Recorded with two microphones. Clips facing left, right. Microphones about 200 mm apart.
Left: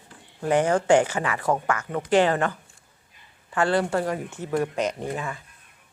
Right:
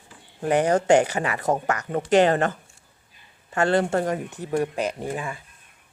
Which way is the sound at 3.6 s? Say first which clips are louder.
Right 2 dB; 25° right (ahead or behind).